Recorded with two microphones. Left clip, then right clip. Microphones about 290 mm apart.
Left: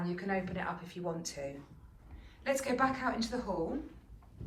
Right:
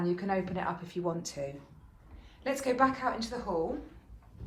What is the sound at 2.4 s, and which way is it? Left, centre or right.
Speech, centre.